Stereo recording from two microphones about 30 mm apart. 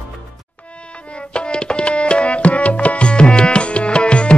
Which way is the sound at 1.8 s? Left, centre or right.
Left.